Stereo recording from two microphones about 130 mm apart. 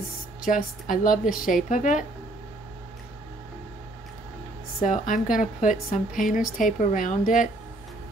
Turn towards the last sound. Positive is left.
turn(degrees=90)